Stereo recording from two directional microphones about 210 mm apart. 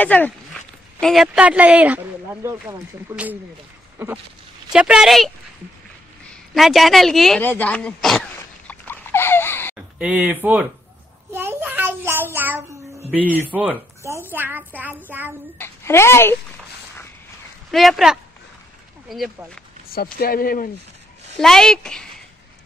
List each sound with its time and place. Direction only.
0.0 s speech: 10° left (ahead or behind); by 3.3 s 10° right (ahead or behind)
4.7 s speech: 5° right (ahead or behind)
6.5 s speech: centre (ahead or behind)
8.4 s a sound: 10° left (ahead or behind)
9.9 s speech: 5° right (ahead or behind)
11.3 s child singing: 10° right (ahead or behind)
13.1 s speech: 10° right (ahead or behind)
15.5 s a child's voice: 10° left (ahead or behind)
17.6 s speech: centre (ahead or behind)
19.9 s speech: 45° left (ahead or behind)
21.4 s speech: centre (ahead or behind)